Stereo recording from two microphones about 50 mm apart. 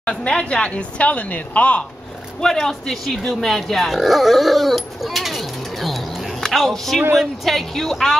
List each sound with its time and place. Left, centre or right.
0.3 s a woman's voice: centre
2.4 s speech: centre